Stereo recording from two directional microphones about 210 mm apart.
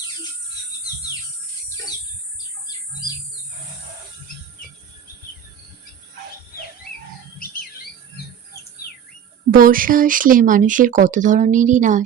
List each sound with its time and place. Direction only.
9.5 s speech: 40° right (ahead or behind)